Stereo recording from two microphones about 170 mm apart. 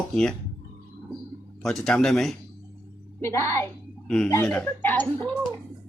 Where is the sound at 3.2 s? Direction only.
15° left (ahead or behind).